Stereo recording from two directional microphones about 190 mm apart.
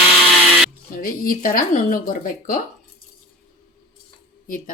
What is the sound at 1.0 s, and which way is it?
Speech, 50° left (ahead or behind).